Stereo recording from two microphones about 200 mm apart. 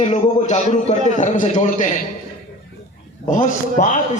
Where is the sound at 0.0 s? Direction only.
35° left (ahead or behind).